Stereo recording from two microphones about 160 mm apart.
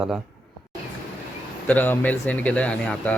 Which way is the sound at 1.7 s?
10° left (ahead or behind).